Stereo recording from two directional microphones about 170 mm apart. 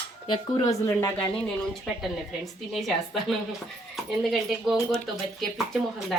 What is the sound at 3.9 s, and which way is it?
Speech, centre (ahead or behind).